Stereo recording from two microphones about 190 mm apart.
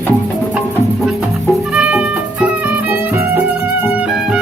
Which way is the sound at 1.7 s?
5° right (ahead or behind).